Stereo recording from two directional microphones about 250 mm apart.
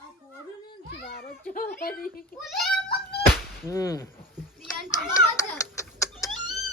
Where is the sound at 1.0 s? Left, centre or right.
Left.